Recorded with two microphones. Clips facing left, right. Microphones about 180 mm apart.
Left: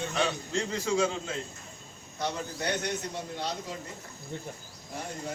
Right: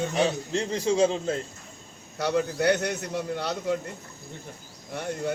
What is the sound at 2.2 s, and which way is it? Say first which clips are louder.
A man's voice: right 8 dB; 70° right (ahead or behind).